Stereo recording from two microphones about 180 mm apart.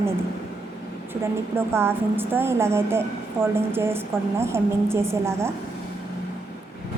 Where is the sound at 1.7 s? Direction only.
15° right (ahead or behind).